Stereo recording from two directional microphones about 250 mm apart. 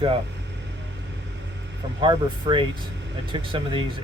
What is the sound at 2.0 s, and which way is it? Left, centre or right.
Speech, centre.